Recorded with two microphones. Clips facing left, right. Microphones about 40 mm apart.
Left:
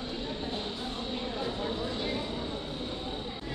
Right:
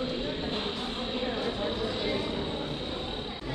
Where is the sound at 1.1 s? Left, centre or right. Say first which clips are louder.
Right 4 dB; right.